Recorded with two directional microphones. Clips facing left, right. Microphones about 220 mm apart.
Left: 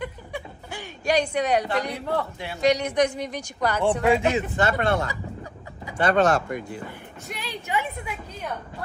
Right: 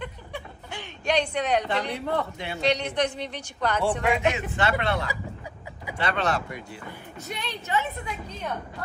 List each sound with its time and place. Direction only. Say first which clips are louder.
0.0 s speech: left 3 dB; 10° left (ahead or behind)
4.3 s speech: left 3 dB; 40° left (ahead or behind)
7.2 s a woman's voice: even; 5° left (ahead or behind)